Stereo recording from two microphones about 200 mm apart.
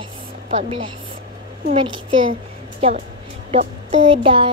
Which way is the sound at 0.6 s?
25° right (ahead or behind).